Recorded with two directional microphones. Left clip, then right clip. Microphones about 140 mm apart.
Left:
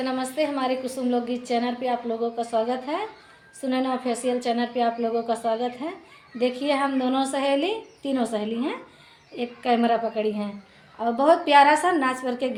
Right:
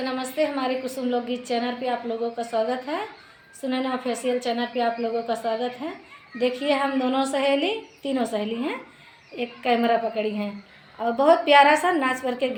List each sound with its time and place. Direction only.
0.0 s a woman's voice: 5° right (ahead or behind)